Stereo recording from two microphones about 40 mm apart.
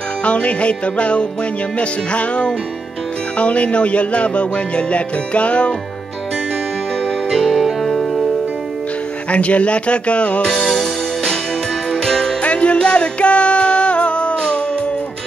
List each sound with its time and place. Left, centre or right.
0.2 s music: left
7.2 s music: centre
9.3 s music: left
10.5 s music: centre
12.4 s music: left